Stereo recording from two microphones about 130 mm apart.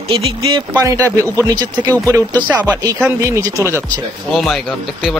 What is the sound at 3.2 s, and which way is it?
Speech, 25° right (ahead or behind).